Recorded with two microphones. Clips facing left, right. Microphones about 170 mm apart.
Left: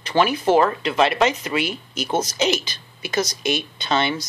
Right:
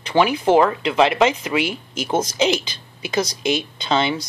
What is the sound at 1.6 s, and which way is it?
Speech, 90° right.